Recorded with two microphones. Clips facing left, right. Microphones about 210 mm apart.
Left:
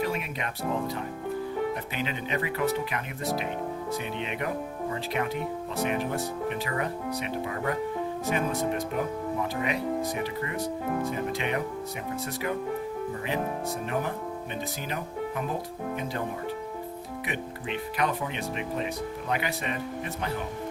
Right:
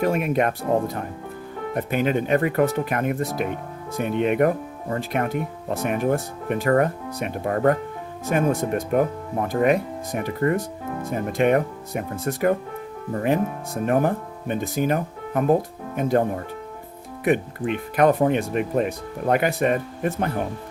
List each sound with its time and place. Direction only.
0.0 s speech: 50° right (ahead or behind)
17.2 s speech: 50° right (ahead or behind)